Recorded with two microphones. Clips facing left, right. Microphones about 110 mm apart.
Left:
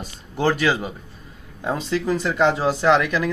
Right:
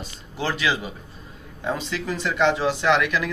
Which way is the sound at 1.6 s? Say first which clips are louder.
Left 4 dB; 35° left (ahead or behind).